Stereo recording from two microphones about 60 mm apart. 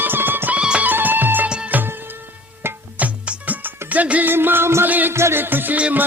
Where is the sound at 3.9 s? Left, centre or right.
Right.